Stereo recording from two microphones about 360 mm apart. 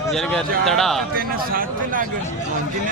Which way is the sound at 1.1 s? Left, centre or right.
Right.